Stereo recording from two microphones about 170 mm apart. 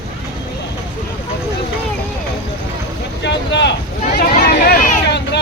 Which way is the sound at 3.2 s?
90° left.